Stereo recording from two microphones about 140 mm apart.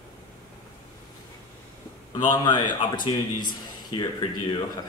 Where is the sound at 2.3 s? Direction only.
30° left (ahead or behind).